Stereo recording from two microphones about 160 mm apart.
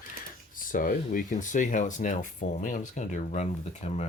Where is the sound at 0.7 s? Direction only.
60° left (ahead or behind).